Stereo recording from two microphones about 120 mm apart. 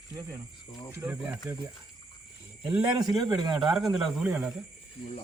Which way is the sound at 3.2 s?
35° right (ahead or behind).